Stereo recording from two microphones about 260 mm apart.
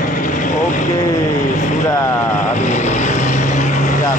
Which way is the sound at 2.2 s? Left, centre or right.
Left.